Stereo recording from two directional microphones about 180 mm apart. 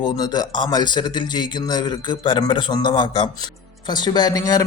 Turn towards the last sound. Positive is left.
turn(degrees=20)  # may be behind; listen again after turning